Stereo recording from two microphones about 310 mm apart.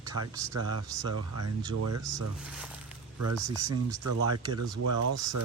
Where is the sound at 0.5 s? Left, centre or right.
Right.